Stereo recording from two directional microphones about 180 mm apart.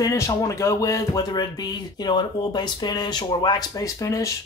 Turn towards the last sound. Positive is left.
turn(degrees=20)  # may be behind; listen again after turning